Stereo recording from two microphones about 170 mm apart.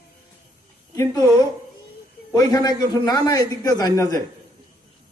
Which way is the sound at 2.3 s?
20° left (ahead or behind).